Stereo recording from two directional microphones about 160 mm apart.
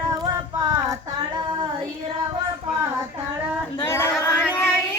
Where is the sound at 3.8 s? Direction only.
15° left (ahead or behind).